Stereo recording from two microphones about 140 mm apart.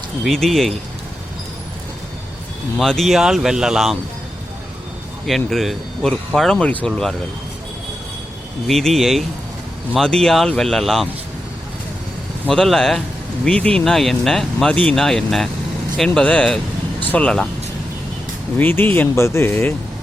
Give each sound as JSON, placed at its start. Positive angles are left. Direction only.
{"t": 0.3, "sound": "speech", "side_deg": 5}
{"t": 2.7, "sound": "speech", "side_deg": 0}
{"t": 5.2, "sound": "speech", "side_deg": 0}
{"t": 8.6, "sound": "speech", "side_deg": 0}
{"t": 12.5, "sound": "speech", "side_deg": 5}
{"t": 18.5, "sound": "speech", "side_deg": 15}